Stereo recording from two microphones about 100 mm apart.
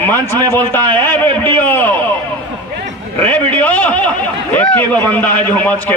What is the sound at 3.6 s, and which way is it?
A man's voice, 15° left (ahead or behind).